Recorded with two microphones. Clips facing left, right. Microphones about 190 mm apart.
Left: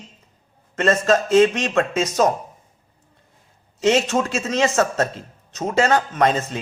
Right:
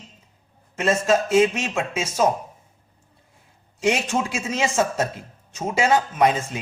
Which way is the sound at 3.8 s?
10° right (ahead or behind).